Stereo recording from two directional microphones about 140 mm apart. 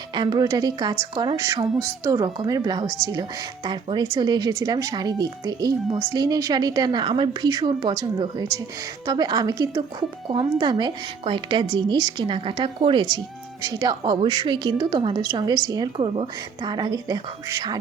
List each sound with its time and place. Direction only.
0.1 s a woman's voice: 30° right (ahead or behind)
1.4 s speech: 20° right (ahead or behind)
2.1 s speech: 30° right (ahead or behind)
9.0 s a woman's voice: 30° right (ahead or behind)